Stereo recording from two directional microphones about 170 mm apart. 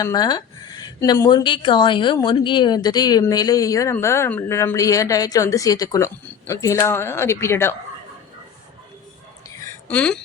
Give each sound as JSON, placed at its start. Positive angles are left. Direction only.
{"t": 0.0, "sound": "speech", "side_deg": 20}
{"t": 9.5, "sound": "a sound", "side_deg": 20}
{"t": 9.9, "sound": "speech", "side_deg": 5}